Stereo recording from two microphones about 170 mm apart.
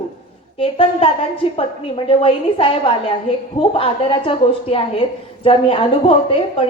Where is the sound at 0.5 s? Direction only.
30° left (ahead or behind).